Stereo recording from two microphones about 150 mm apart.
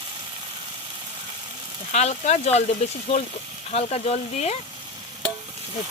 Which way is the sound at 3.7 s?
45° left (ahead or behind).